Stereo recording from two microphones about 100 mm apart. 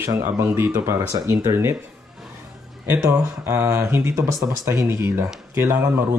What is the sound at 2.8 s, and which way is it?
Speech, 25° right (ahead or behind).